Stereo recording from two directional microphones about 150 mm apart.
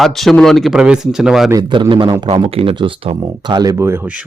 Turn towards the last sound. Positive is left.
turn(degrees=-10)  # may be behind; listen again after turning